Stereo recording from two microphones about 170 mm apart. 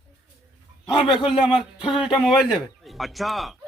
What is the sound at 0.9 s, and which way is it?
Speech, 25° left (ahead or behind).